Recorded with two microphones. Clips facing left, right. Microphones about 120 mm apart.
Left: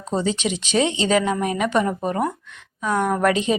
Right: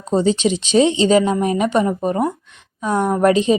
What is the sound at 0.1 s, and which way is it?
A woman's voice, 30° right (ahead or behind).